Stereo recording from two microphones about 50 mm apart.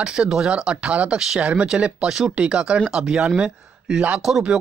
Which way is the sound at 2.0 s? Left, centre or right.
Centre.